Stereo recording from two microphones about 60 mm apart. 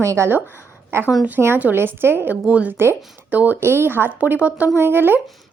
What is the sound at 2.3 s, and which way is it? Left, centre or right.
Speech, right.